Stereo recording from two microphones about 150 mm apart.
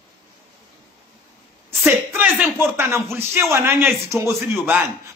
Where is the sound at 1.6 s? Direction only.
15° right (ahead or behind).